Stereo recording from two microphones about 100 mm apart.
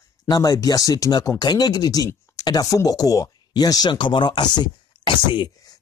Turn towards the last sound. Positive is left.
turn(degrees=50)  # may be behind; listen again after turning